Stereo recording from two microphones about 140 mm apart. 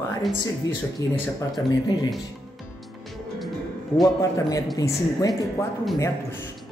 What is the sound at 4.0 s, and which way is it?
Speech, 25° left (ahead or behind).